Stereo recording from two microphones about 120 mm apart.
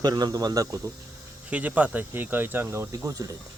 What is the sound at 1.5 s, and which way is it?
Speech, 10° right (ahead or behind).